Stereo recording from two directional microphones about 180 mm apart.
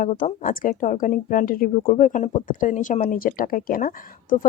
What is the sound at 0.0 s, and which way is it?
Speech, 45° left (ahead or behind).